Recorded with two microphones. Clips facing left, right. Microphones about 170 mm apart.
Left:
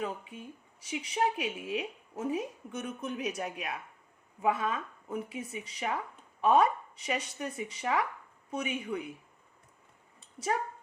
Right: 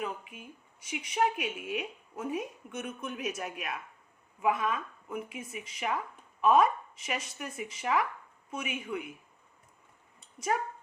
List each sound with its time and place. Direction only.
0.0 s speech: 35° left (ahead or behind)